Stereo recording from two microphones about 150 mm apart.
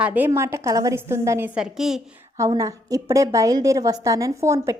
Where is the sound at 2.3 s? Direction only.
20° right (ahead or behind).